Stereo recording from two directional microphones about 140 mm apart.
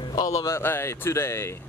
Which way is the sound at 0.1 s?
25° left (ahead or behind).